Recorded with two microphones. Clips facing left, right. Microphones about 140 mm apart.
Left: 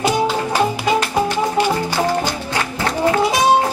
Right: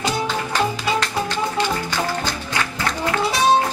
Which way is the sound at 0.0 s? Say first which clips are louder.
Left 5 dB; 15° left (ahead or behind).